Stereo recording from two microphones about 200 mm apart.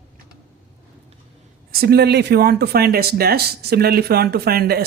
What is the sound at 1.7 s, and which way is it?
Speech, 50° right (ahead or behind).